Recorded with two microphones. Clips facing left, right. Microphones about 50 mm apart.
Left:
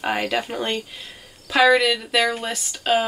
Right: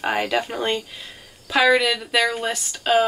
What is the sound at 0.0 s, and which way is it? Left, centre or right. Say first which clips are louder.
Speech: right 1 dB; centre.